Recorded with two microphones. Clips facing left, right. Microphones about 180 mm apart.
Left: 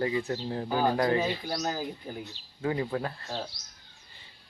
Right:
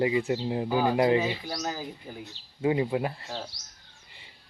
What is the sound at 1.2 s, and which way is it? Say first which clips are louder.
Speech: even; 5° right (ahead or behind).